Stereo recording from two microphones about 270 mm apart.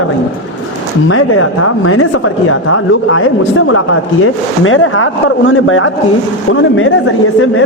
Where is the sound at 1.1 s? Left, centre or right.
Left.